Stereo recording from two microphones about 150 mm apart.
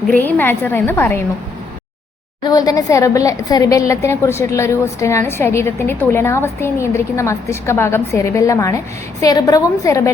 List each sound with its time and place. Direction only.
0.1 s a woman's voice: 10° left (ahead or behind)
2.4 s a woman's voice: 25° left (ahead or behind)